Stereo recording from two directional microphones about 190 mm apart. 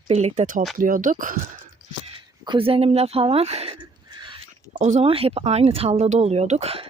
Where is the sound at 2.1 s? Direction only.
25° right (ahead or behind).